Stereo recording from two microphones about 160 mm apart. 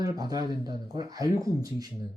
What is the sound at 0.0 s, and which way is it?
Speech, 25° right (ahead or behind).